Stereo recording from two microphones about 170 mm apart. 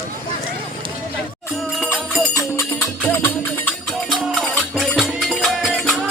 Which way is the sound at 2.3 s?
15° left (ahead or behind).